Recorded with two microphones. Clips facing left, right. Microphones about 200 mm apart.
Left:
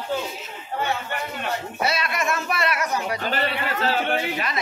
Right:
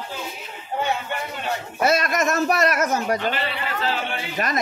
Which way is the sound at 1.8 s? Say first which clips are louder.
Right 6 dB; 45° right (ahead or behind).